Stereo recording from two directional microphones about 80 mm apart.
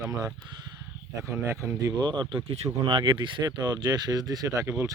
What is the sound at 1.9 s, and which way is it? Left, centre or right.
Speech, right.